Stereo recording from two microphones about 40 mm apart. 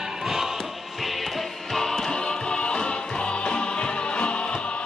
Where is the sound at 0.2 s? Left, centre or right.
Centre.